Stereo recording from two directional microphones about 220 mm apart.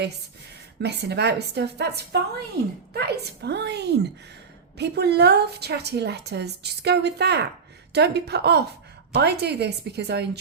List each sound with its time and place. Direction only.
0.8 s a woman's voice: 50° right (ahead or behind)